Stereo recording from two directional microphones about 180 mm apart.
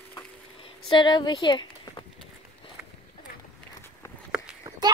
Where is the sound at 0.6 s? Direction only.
25° left (ahead or behind).